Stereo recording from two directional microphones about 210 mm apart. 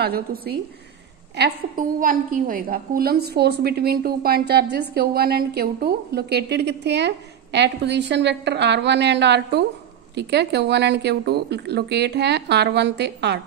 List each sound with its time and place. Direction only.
0.0 s a woman's voice: 45° right (ahead or behind)